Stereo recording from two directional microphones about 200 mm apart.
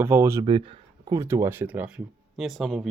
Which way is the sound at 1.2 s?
15° right (ahead or behind).